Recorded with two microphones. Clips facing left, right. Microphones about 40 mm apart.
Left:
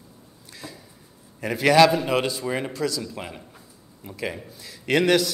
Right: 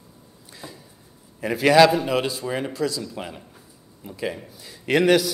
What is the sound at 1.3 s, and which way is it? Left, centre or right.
A man's voice, centre.